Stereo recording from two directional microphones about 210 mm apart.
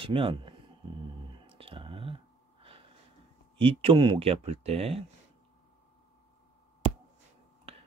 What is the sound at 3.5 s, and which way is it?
Speech, 25° right (ahead or behind).